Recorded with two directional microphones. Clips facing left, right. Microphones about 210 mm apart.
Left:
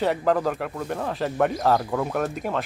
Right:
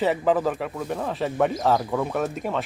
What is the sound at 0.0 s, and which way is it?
Speech, 5° right (ahead or behind).